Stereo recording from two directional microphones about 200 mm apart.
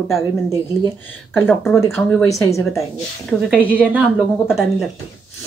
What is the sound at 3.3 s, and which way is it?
A woman's voice, centre (ahead or behind).